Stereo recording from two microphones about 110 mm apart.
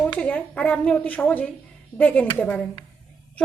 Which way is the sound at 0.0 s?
10° left (ahead or behind).